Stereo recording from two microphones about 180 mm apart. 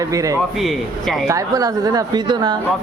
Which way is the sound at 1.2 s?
20° right (ahead or behind).